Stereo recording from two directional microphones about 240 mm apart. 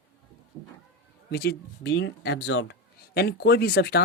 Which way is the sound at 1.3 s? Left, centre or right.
Left.